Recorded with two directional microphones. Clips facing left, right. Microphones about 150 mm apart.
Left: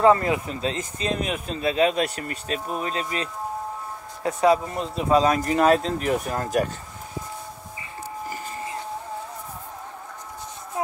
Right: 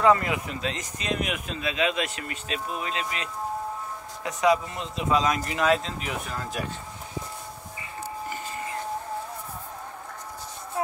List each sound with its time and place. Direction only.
0.0 s speech: 30° left (ahead or behind); by 6.7 s 50° left (ahead or behind)